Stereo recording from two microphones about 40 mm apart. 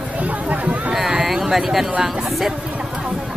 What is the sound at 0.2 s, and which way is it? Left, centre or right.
Chatter, right.